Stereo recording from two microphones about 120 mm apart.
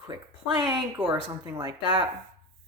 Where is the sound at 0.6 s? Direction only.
40° right (ahead or behind).